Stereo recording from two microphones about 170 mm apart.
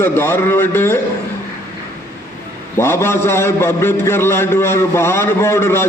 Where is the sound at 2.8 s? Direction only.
15° left (ahead or behind).